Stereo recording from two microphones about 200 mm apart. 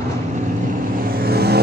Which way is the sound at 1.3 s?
50° right (ahead or behind).